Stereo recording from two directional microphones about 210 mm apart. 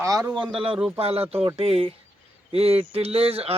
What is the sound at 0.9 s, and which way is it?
Speech, 30° right (ahead or behind).